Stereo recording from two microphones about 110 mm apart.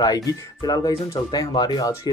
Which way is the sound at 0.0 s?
35° left (ahead or behind).